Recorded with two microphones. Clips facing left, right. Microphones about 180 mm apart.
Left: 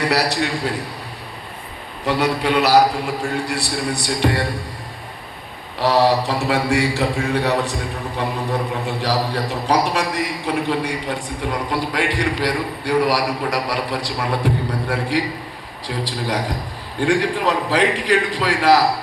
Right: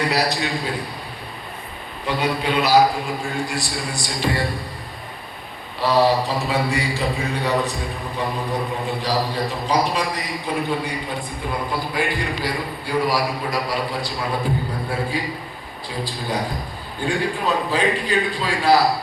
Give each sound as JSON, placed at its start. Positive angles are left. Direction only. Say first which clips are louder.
{"t": 0.1, "sound": "a man's voice", "louder": "left 2 dB", "side_deg": 70}
{"t": 2.0, "sound": "a man's voice", "louder": "left 3 dB", "side_deg": 70}
{"t": 5.8, "sound": "a man's voice", "louder": "left 1 dB", "side_deg": 70}
{"t": 9.0, "sound": "a man's voice", "louder": "left 2 dB", "side_deg": 75}
{"t": 11.7, "sound": "a man's voice", "louder": "left 2 dB", "side_deg": 90}